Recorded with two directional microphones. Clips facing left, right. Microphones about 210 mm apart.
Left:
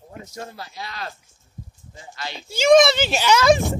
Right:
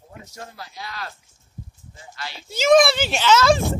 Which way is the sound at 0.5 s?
25° left (ahead or behind).